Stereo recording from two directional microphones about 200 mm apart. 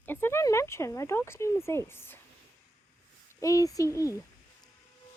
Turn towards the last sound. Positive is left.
turn(degrees=15)  # may be behind; listen again after turning